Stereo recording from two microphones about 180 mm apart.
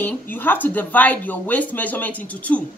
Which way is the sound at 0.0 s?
10° left (ahead or behind).